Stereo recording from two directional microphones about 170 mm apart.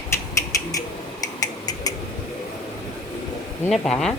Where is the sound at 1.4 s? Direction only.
20° left (ahead or behind).